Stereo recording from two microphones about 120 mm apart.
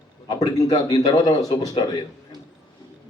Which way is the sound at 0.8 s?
40° left (ahead or behind).